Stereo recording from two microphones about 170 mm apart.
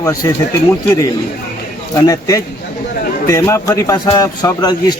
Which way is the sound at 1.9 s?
20° left (ahead or behind).